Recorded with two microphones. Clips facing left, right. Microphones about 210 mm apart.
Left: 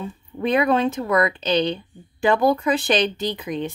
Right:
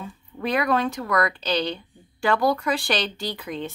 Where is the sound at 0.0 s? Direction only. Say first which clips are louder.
Left 5 dB; 20° left (ahead or behind).